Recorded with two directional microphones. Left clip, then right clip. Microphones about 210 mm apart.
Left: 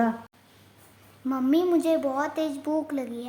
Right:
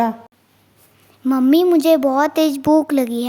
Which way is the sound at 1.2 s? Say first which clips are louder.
Right 10 dB; 40° right (ahead or behind).